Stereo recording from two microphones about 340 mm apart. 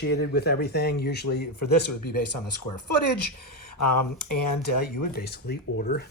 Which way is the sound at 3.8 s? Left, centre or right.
Left.